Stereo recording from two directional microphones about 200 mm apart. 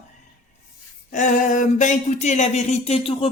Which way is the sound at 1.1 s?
40° left (ahead or behind).